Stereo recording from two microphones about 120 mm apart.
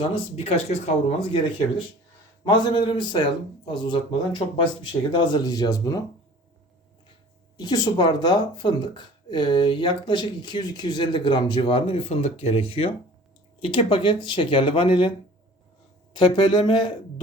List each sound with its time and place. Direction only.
0.0 s speech: 55° left (ahead or behind)
2.4 s speech: 40° left (ahead or behind)
7.5 s speech: 35° left (ahead or behind)
11.9 s speech: 55° left (ahead or behind)
16.1 s speech: 40° left (ahead or behind)